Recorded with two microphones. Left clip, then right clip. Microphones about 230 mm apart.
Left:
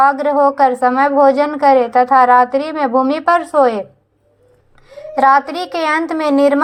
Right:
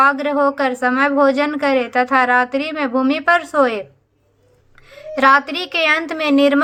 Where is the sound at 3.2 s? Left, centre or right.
Centre.